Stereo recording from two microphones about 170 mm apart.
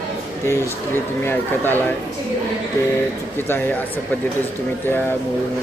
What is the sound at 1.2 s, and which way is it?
Speech, 10° left (ahead or behind).